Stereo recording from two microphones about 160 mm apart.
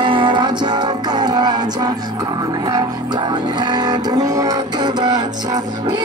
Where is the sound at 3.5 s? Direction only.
25° right (ahead or behind).